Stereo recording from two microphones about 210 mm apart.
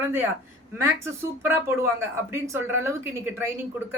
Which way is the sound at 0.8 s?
10° right (ahead or behind).